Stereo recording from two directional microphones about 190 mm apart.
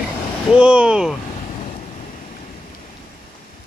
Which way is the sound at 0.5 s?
5° right (ahead or behind).